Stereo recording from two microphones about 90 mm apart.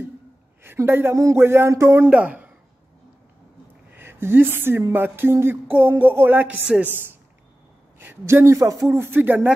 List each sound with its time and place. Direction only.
0.7 s a woman's voice: 25° right (ahead or behind)
2.0 s a woman's voice: 15° right (ahead or behind)
3.9 s speech: 25° right (ahead or behind)
4.9 s music: 25° right (ahead or behind)
8.0 s speech: 25° right (ahead or behind)
8.9 s music: 25° right (ahead or behind)